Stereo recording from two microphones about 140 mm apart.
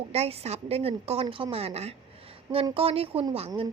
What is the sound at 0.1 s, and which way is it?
A woman's voice, 45° right (ahead or behind).